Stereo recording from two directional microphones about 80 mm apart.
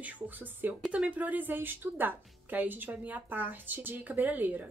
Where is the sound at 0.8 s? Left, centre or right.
Centre.